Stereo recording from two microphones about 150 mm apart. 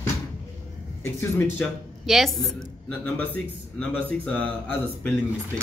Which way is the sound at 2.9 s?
10° left (ahead or behind).